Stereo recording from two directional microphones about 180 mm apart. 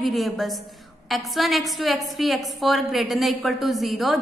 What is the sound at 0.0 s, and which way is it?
A woman's voice, centre (ahead or behind).